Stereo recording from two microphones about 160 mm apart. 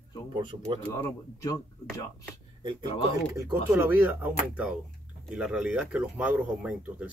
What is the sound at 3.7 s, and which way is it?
Speech, 10° right (ahead or behind).